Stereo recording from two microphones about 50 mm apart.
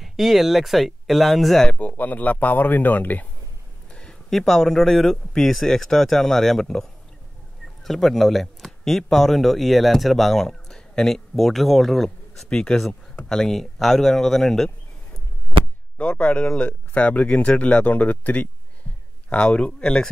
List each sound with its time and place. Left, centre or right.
0.0 s speech: centre
1.8 s speech: left
3.9 s speech: centre
12.4 s speech: centre
16.0 s speech: left
19.2 s speech: centre